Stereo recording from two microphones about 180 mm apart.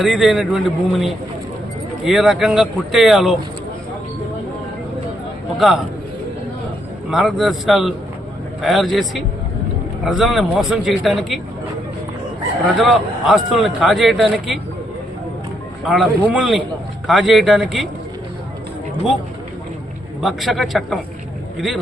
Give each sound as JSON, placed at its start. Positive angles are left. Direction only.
{"t": 0.0, "sound": "a man's voice", "side_deg": 0}
{"t": 5.5, "sound": "a man's voice", "side_deg": 0}
{"t": 7.1, "sound": "a man's voice", "side_deg": 0}
{"t": 12.6, "sound": "a man's voice", "side_deg": 0}
{"t": 15.9, "sound": "a man's voice", "side_deg": 0}
{"t": 20.2, "sound": "a man's voice", "side_deg": 0}